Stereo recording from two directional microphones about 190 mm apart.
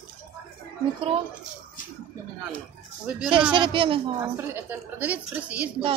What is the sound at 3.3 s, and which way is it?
Speech, 25° right (ahead or behind).